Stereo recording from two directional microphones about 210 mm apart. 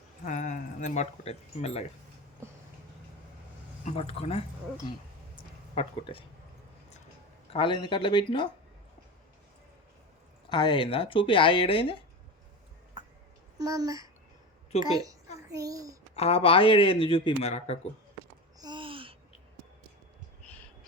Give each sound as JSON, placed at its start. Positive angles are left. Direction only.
{"t": 0.3, "sound": "speech", "side_deg": 35}
{"t": 3.8, "sound": "speech", "side_deg": 25}
{"t": 5.7, "sound": "speech", "side_deg": 25}
{"t": 7.5, "sound": "speech", "side_deg": 25}
{"t": 10.5, "sound": "speech", "side_deg": 20}
{"t": 13.6, "sound": "a child's voice", "side_deg": -15}
{"t": 16.1, "sound": "speech", "side_deg": 30}
{"t": 18.6, "sound": "a sound", "side_deg": -20}